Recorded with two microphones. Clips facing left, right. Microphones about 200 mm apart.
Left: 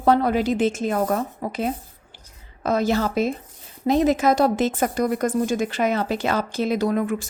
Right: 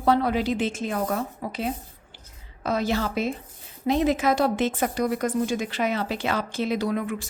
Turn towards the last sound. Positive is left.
turn(degrees=45)  # may be behind; listen again after turning